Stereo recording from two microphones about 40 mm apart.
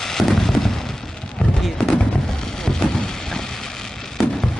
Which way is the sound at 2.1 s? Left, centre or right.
Centre.